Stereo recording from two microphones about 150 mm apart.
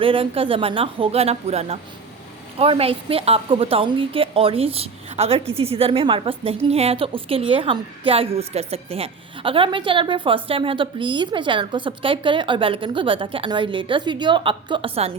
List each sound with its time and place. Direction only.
0.0 s a woman's voice: 35° right (ahead or behind)